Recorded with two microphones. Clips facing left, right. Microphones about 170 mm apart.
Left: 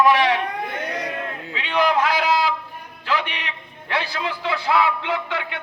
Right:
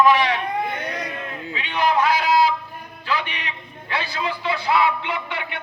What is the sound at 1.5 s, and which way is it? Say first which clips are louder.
A man's voice: left 1 dB; 90° left.